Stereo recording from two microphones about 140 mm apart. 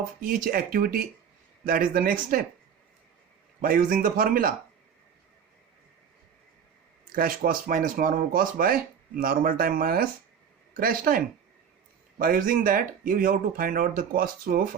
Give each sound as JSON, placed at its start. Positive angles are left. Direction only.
{"t": 0.2, "sound": "speech", "side_deg": -80}
{"t": 3.6, "sound": "speech", "side_deg": -90}
{"t": 7.1, "sound": "speech", "side_deg": -90}
{"t": 12.2, "sound": "speech", "side_deg": -85}